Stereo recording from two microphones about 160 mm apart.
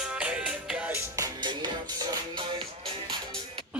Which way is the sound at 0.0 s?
5° right (ahead or behind).